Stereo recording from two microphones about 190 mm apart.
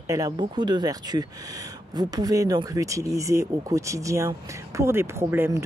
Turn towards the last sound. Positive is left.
turn(degrees=-10)  # may be behind; listen again after turning